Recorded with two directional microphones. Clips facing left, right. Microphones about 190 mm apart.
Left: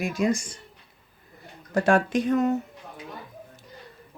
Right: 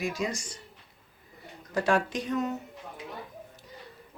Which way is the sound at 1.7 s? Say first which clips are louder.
Left 5 dB; 50° left (ahead or behind).